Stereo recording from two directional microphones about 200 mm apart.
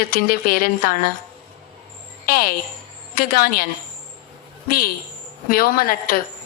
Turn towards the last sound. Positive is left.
turn(degrees=45)  # may be behind; listen again after turning